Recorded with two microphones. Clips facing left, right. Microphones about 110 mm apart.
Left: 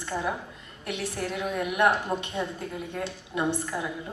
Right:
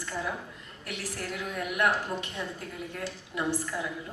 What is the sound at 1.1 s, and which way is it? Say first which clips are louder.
A woman's voice: left 5 dB; 20° left (ahead or behind).